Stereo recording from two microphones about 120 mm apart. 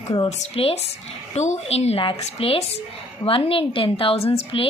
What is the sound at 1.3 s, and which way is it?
A woman's voice, 70° left (ahead or behind).